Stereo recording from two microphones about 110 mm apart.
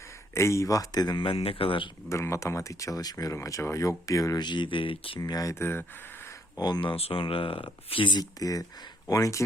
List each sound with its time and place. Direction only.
0.3 s speech: 25° left (ahead or behind); by 1.9 s 55° left (ahead or behind)
2.0 s speech: 30° left (ahead or behind)
4.4 s speech: 45° left (ahead or behind)
5.2 s speech: 35° left (ahead or behind)
6.6 s speech: 40° left (ahead or behind)